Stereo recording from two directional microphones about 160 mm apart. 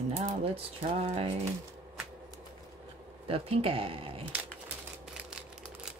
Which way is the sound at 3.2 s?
35° right (ahead or behind).